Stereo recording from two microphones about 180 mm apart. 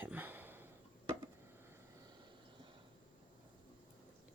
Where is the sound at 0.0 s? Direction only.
10° right (ahead or behind).